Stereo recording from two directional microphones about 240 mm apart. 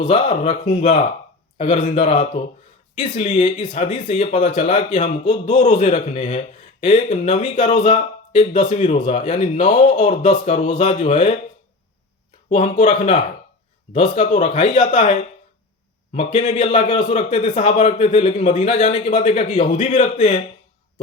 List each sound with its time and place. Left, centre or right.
0.0 s a man's voice: left
12.5 s a man's voice: left
16.1 s a man's voice: left